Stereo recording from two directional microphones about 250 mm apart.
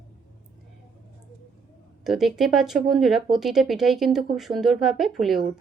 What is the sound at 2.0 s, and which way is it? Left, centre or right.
Speech, centre.